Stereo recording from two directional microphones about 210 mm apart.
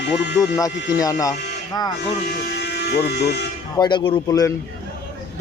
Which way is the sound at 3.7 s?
20° left (ahead or behind).